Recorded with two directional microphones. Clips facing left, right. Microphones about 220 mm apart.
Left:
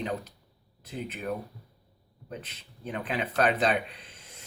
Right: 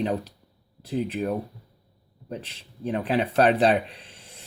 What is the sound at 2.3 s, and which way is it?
Speech, 30° right (ahead or behind).